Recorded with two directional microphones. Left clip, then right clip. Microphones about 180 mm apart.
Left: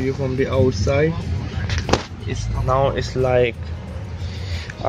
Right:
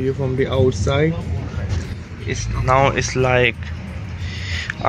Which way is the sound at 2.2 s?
5° right (ahead or behind).